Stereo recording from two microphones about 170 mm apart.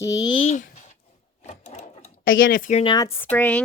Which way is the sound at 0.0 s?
20° left (ahead or behind).